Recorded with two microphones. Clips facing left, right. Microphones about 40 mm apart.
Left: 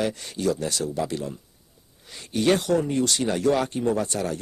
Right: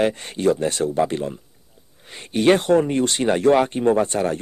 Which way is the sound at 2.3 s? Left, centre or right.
Right.